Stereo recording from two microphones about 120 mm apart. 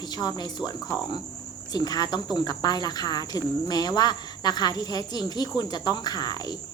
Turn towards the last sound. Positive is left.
turn(degrees=35)  # may be behind; listen again after turning